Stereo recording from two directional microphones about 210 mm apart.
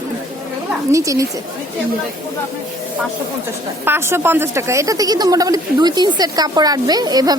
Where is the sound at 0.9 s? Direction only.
15° right (ahead or behind).